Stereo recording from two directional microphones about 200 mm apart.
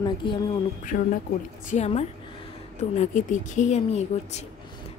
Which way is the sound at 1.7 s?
35° left (ahead or behind).